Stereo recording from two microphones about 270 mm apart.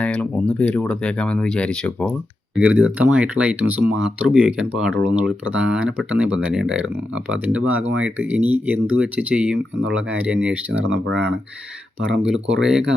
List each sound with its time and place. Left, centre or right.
0.0 s speech: centre
10.8 s speech: right
12.2 s speech: centre